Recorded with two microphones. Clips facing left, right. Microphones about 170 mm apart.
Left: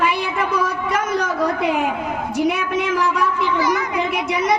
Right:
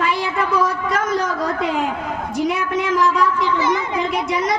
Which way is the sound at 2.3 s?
60° left (ahead or behind).